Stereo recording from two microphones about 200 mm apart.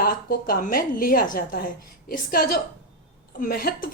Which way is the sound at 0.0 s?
50° left (ahead or behind).